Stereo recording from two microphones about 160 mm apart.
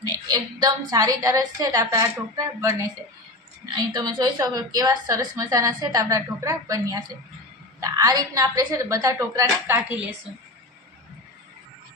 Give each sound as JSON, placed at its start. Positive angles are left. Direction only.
{"t": 0.0, "sound": "a woman's voice", "side_deg": -25}